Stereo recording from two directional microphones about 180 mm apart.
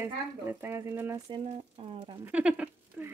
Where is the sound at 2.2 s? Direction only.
10° right (ahead or behind).